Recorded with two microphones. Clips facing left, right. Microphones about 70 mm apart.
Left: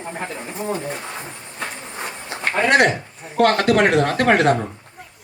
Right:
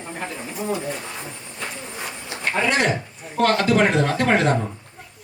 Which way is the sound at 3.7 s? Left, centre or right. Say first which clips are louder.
Left 2 dB; left.